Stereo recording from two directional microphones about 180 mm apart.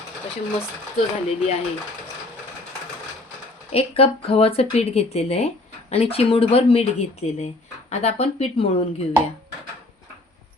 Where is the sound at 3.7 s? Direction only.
35° left (ahead or behind).